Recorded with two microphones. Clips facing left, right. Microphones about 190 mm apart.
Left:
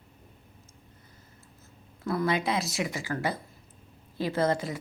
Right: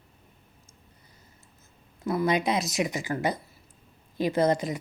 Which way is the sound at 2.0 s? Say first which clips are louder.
Right 2 dB; 15° right (ahead or behind).